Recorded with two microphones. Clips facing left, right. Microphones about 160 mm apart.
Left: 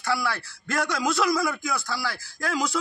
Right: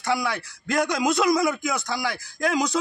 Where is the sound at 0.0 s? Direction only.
20° right (ahead or behind).